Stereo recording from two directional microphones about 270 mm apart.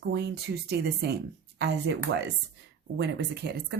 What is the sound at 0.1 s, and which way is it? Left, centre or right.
Speech, right.